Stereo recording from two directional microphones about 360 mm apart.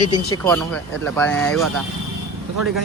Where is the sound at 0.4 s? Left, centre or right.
Centre.